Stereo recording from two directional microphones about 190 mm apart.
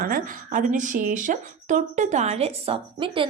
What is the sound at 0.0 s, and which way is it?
Speech, 45° right (ahead or behind).